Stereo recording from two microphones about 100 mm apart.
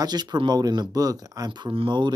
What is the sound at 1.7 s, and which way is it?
Speech, 60° right (ahead or behind).